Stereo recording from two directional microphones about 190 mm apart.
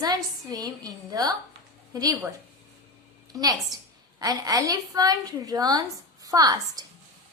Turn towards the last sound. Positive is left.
turn(degrees=-20)  # may be behind; listen again after turning